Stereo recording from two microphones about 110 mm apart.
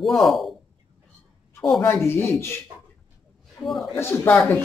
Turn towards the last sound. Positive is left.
turn(degrees=20)  # may be behind; listen again after turning